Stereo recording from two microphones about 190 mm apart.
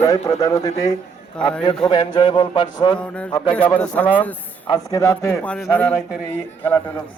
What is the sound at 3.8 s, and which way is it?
A man's voice, 10° left (ahead or behind).